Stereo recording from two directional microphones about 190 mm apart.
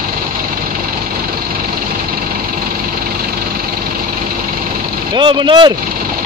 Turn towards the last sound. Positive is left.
turn(degrees=-25)  # may be behind; listen again after turning